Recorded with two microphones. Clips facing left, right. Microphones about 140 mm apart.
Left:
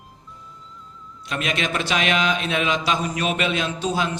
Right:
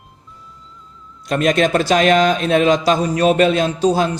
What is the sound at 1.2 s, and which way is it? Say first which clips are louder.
A man's voice: right 10 dB; 40° right (ahead or behind).